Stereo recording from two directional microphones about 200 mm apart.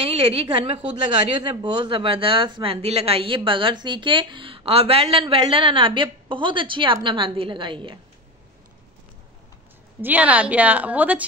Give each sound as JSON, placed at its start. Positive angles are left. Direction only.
{"t": 0.0, "sound": "a woman's voice", "side_deg": -30}
{"t": 10.0, "sound": "a woman's voice", "side_deg": -5}